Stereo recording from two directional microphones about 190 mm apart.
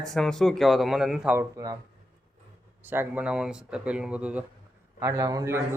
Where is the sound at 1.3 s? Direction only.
20° right (ahead or behind).